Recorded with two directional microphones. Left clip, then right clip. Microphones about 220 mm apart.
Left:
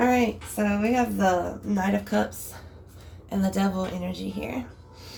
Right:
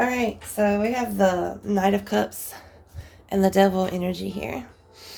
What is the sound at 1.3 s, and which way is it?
Speech, 50° right (ahead or behind).